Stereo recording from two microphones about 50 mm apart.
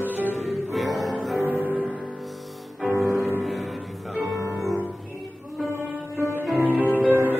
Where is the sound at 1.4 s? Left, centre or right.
Right.